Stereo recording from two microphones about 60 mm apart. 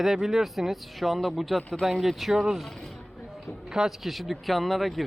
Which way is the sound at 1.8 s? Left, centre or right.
Centre.